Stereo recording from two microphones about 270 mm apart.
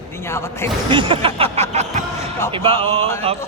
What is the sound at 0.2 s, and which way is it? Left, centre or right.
Speech, centre.